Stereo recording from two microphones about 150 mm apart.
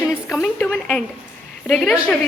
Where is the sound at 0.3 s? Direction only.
Centre (ahead or behind).